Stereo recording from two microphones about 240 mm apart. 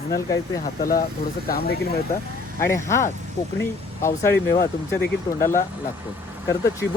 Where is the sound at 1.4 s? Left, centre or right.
Left.